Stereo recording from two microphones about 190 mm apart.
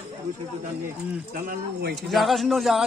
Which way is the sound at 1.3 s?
50° right (ahead or behind).